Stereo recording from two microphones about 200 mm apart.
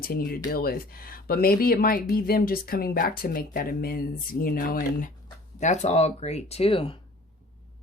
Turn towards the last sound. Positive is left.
turn(degrees=30)  # may be behind; listen again after turning